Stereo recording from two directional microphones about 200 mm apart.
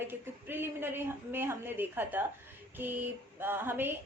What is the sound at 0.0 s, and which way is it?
A woman's voice, 10° right (ahead or behind).